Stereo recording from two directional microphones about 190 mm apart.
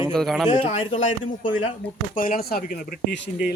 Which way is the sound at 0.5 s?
35° left (ahead or behind).